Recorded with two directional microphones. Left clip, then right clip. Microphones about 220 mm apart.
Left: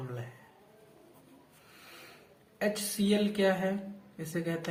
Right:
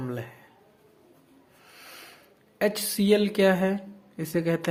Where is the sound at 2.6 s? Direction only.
45° right (ahead or behind).